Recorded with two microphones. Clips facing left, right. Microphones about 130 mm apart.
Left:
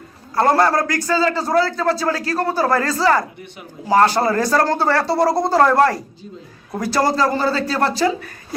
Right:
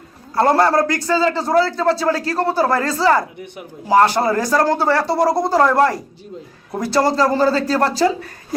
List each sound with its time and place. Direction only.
0.3 s a man's voice: 25° right (ahead or behind)